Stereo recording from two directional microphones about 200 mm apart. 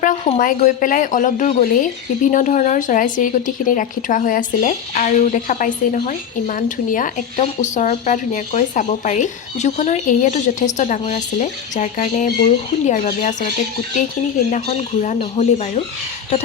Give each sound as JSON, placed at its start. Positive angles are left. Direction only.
{"t": 0.0, "sound": "a woman's voice", "side_deg": 40}
{"t": 14.5, "sound": "a woman's voice", "side_deg": 35}